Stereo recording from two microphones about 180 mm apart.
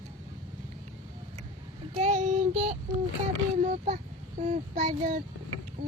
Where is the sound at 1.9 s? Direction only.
40° right (ahead or behind).